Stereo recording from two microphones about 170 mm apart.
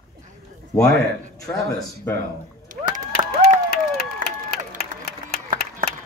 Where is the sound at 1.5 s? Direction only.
15° left (ahead or behind).